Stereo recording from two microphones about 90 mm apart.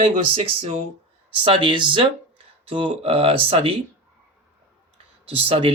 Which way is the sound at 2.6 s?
90° right.